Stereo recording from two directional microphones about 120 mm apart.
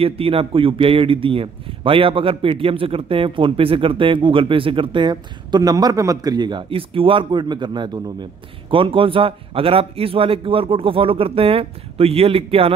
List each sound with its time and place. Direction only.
0.0 s a man's voice: 50° right (ahead or behind)